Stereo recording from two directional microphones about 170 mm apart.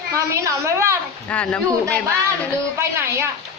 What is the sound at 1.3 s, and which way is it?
Speech, 5° left (ahead or behind).